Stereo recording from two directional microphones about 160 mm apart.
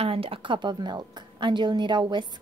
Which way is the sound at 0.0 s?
35° right (ahead or behind).